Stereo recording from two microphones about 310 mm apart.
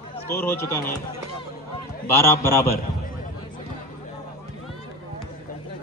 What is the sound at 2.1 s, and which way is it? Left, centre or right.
Speech, centre.